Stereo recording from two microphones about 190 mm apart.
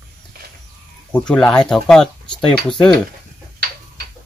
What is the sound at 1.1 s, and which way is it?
Speech, 5° left (ahead or behind).